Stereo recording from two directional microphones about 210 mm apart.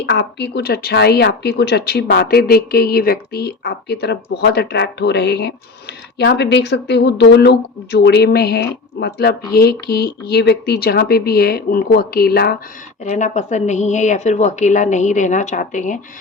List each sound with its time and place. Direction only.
0.0 s speech: 55° left (ahead or behind)
13.1 s speech: 35° left (ahead or behind)